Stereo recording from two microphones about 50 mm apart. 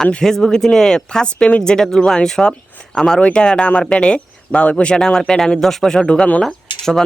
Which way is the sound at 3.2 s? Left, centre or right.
Left.